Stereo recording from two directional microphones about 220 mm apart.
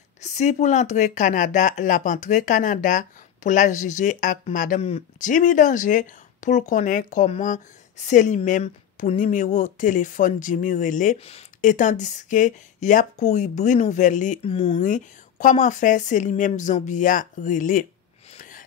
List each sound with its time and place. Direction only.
0.2 s speech: 30° left (ahead or behind)
18.3 s gasp: 35° left (ahead or behind)